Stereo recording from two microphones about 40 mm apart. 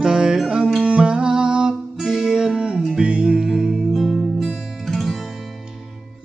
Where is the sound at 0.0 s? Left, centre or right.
Centre.